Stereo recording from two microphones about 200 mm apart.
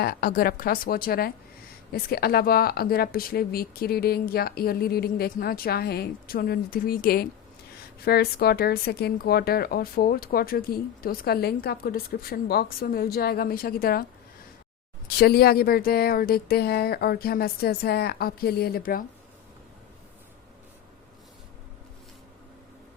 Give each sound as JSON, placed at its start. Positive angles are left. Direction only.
{"t": 0.0, "sound": "speech", "side_deg": 50}